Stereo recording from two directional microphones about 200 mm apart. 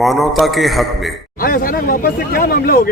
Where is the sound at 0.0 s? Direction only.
Centre (ahead or behind).